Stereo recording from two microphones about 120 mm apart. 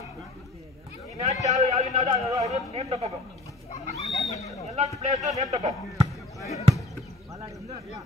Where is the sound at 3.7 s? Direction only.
70° left (ahead or behind).